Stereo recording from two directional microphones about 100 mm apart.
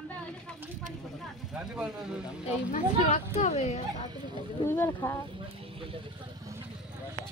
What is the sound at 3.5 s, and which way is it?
Speech, 90° left.